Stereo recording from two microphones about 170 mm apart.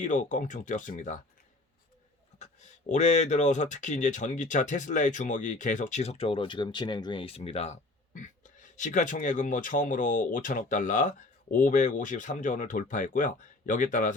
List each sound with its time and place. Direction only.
0.0 s speech: 50° left (ahead or behind)
2.4 s speech: 45° left (ahead or behind)